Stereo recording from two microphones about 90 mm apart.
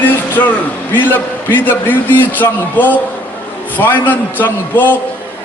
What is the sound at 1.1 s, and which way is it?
A man's voice, 20° left (ahead or behind).